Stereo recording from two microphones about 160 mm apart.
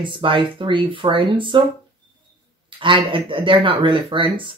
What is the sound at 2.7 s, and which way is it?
Speech, 30° right (ahead or behind).